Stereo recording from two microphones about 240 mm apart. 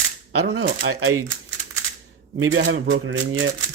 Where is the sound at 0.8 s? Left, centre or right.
Right.